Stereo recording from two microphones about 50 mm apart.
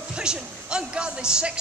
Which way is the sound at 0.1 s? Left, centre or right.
Centre.